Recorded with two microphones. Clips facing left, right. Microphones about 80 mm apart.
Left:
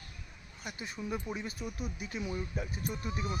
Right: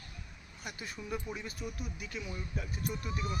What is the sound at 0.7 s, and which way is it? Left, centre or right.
Speech, centre.